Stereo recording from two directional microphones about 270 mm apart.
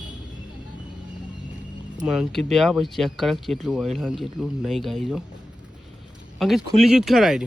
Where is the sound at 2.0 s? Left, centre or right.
Centre.